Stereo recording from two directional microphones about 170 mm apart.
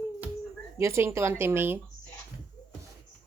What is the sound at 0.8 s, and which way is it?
Speech, 15° right (ahead or behind).